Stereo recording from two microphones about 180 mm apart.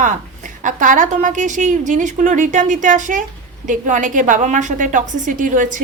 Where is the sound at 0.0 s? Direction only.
45° right (ahead or behind).